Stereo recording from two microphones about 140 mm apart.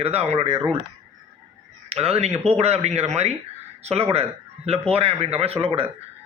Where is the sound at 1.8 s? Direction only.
45° right (ahead or behind).